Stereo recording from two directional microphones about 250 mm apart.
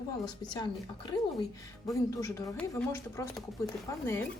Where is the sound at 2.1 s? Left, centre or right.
Centre.